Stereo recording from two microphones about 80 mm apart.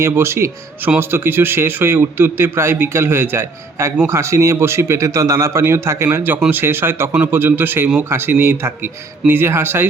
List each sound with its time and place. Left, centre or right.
0.0 s a man's voice: right
6.1 s a man's voice: right